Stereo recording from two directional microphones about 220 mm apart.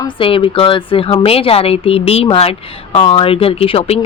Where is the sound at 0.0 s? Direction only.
25° left (ahead or behind).